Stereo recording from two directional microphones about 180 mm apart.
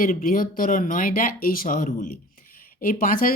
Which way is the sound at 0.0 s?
50° left (ahead or behind).